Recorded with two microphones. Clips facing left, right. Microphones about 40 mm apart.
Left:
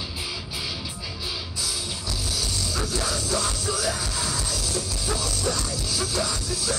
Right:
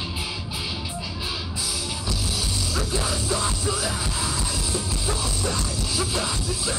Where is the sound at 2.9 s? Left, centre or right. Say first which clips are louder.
Right 1 dB; right.